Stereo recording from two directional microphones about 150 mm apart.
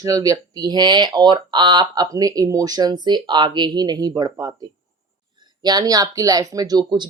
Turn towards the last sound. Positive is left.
turn(degrees=-30)  # may be behind; listen again after turning